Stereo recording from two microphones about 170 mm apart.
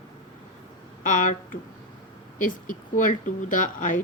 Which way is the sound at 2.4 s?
50° left (ahead or behind).